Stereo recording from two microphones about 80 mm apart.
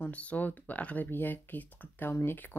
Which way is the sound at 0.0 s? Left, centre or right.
Centre.